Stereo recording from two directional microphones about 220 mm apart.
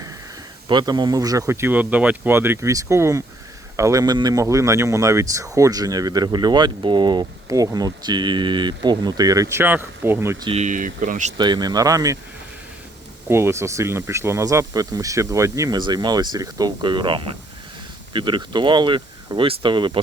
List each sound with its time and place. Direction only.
0.7 s speech: 20° right (ahead or behind)
10.5 s speech: 35° right (ahead or behind)
11.3 s speech: 20° right (ahead or behind)
13.2 s speech: 10° right (ahead or behind)